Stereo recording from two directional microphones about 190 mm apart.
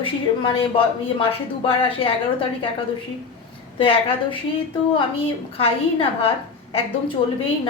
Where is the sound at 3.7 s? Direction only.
30° left (ahead or behind).